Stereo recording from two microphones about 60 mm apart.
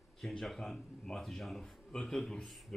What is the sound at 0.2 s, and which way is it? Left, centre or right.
Speech, centre.